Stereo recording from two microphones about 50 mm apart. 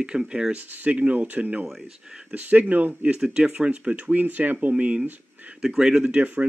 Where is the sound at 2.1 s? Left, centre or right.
Right.